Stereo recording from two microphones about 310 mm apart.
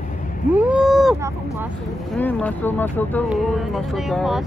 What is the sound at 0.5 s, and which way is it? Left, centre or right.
Vehicle, centre.